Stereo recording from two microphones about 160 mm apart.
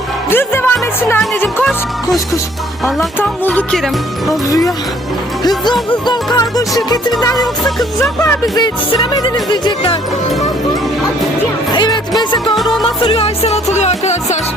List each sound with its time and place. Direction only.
0.3 s speech: 15° left (ahead or behind)
3.2 s music: 10° left (ahead or behind)
4.3 s music: 20° left (ahead or behind)
7.3 s music: centre (ahead or behind)
9.1 s music: 25° left (ahead or behind)
11.7 s music: 25° left (ahead or behind); by 14.3 s 45° left (ahead or behind)